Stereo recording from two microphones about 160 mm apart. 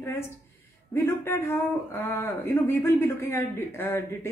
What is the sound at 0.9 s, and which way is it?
Speech, 15° left (ahead or behind).